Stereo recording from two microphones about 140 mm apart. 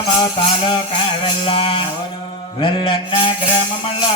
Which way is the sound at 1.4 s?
40° left (ahead or behind).